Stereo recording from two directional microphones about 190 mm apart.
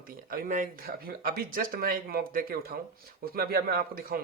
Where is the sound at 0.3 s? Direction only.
45° right (ahead or behind).